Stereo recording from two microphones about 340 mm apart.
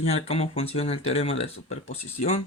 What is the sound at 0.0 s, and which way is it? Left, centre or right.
Speech, centre.